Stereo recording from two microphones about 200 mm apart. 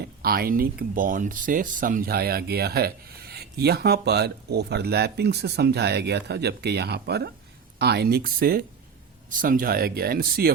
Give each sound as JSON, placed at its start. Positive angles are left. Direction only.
{"t": 0.0, "sound": "speech", "side_deg": -50}